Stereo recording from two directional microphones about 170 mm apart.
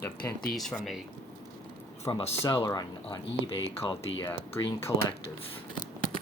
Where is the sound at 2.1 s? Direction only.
25° left (ahead or behind).